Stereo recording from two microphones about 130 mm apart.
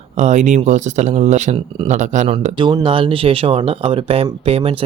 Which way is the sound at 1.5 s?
40° right (ahead or behind).